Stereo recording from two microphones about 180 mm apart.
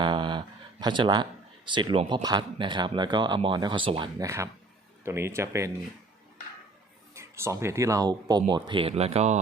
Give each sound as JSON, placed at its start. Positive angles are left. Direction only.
{"t": 0.0, "sound": "a sound", "side_deg": -25}
{"t": 2.2, "sound": "speech", "side_deg": -25}
{"t": 5.0, "sound": "speech", "side_deg": -15}
{"t": 7.1, "sound": "speech", "side_deg": -15}